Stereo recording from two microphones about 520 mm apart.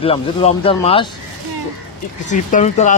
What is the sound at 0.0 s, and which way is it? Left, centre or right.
Speech, centre.